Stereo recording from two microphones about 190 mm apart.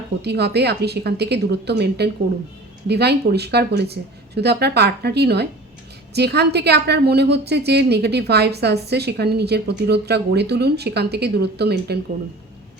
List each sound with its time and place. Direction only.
0.2 s a woman's voice: 60° right (ahead or behind)